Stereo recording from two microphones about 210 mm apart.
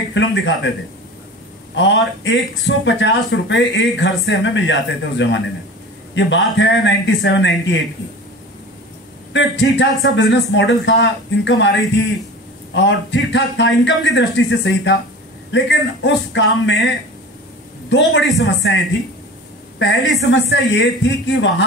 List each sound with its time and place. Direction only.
0.1 s speech: 60° left (ahead or behind)
1.8 s speech: 60° left (ahead or behind)
9.3 s speech: 60° left (ahead or behind)
12.7 s speech: 60° left (ahead or behind)
18.4 s speech: 60° left (ahead or behind)
19.8 s speech: 60° left (ahead or behind)